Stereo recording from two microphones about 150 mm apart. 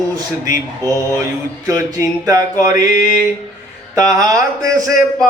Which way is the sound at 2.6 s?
25° right (ahead or behind).